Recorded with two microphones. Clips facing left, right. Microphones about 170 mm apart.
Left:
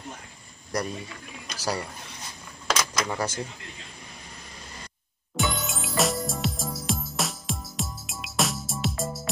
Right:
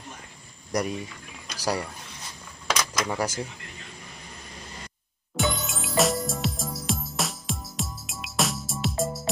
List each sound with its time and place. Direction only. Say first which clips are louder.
0.7 s speech: right 2 dB; 15° right (ahead or behind)
2.7 s keys jangling: even; 5° left (ahead or behind)
5.3 s music: right 1 dB; centre (ahead or behind)